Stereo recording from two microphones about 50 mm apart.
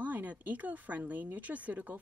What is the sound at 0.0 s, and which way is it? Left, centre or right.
Speech, right.